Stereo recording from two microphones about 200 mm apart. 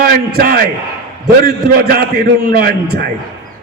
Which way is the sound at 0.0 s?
50° right (ahead or behind).